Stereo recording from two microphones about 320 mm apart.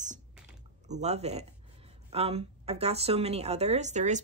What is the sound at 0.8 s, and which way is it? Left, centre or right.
Speech, right.